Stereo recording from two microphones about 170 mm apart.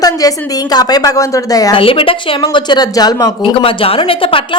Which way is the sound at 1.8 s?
30° left (ahead or behind).